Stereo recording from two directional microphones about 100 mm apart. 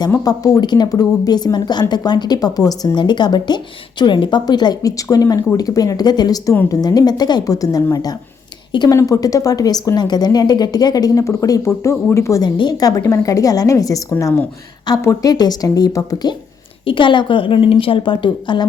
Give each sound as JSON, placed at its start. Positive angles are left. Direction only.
{"t": 0.2, "sound": "a woman's voice", "side_deg": 40}
{"t": 8.9, "sound": "a woman's voice", "side_deg": 35}
{"t": 12.5, "sound": "a woman's voice", "side_deg": 45}
{"t": 14.9, "sound": "a woman's voice", "side_deg": 45}
{"t": 16.8, "sound": "a woman's voice", "side_deg": 55}